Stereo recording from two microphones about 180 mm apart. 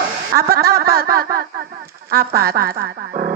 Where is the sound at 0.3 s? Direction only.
60° right (ahead or behind).